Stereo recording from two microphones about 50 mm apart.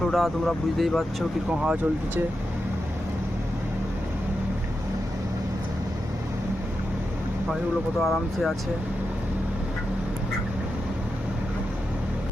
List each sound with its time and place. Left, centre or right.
0.0 s speech: centre
1.5 s speech: right
8.0 s speech: centre